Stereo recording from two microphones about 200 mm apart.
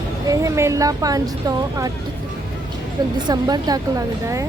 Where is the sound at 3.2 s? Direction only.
20° right (ahead or behind).